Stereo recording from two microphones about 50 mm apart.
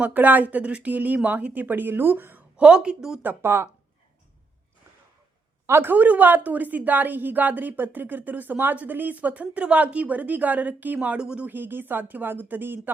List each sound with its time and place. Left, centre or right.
0.0 s a woman's voice: right
1.6 s speech: right
2.6 s a woman's voice: centre
3.4 s speech: right
5.6 s speech: right
5.9 s a woman's voice: right
11.2 s speech: centre
11.4 s a woman's voice: right